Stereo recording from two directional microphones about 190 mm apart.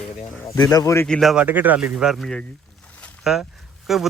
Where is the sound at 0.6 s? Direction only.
20° left (ahead or behind).